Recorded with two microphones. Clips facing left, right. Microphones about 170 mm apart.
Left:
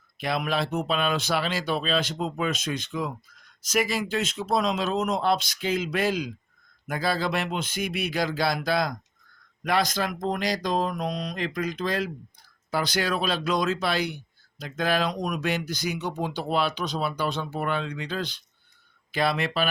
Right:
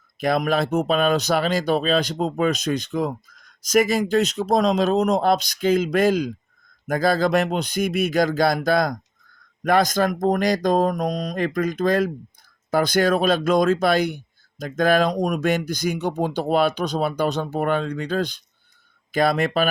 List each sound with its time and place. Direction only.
0.2 s speech: 45° right (ahead or behind)